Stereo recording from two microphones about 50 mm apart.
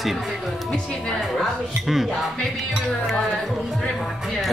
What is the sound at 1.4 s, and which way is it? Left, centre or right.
Speech, centre.